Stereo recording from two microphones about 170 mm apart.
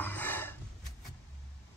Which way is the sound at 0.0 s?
10° left (ahead or behind).